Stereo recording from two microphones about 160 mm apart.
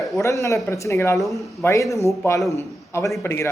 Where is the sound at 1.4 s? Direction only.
Centre (ahead or behind).